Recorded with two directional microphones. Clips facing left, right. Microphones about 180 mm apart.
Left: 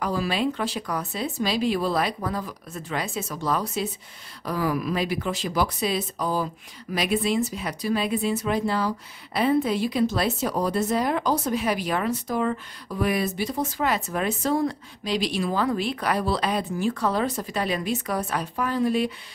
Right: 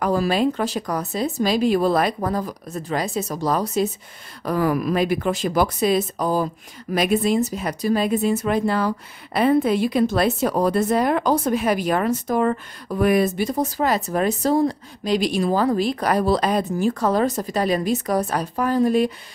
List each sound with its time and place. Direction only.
0.0 s speech: 45° right (ahead or behind)
4.5 s speech: 50° right (ahead or behind)